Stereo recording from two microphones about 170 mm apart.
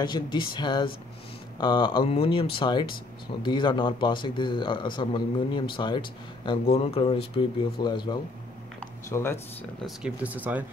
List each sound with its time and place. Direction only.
0.0 s a man's voice: 25° left (ahead or behind)
8.7 s speech: 15° left (ahead or behind)
9.8 s speech: 5° right (ahead or behind)